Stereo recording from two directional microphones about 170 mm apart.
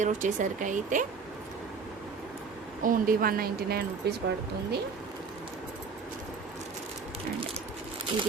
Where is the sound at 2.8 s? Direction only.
55° right (ahead or behind).